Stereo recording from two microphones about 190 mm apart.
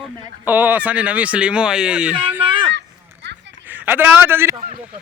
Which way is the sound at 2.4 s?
25° right (ahead or behind).